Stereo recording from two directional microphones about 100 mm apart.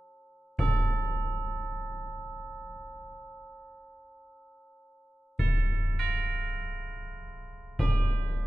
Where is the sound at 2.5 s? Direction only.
15° left (ahead or behind).